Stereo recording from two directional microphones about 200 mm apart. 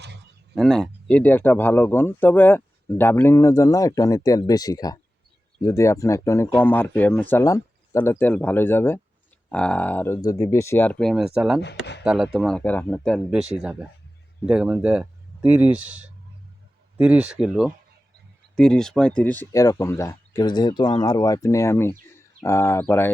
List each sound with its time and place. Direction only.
0.5 s speech: centre (ahead or behind)
11.6 s speech: 60° left (ahead or behind)
12.0 s speech: 5° right (ahead or behind)